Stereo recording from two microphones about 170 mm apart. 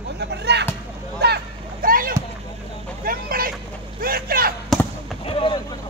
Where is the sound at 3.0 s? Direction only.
60° right (ahead or behind).